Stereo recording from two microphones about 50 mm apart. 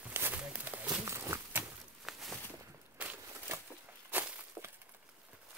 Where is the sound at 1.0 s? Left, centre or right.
Right.